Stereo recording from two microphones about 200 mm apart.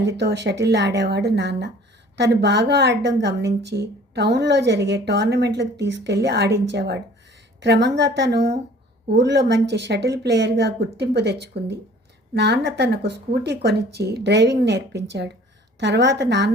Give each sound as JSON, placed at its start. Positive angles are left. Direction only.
{"t": 0.0, "sound": "a woman's voice", "side_deg": -60}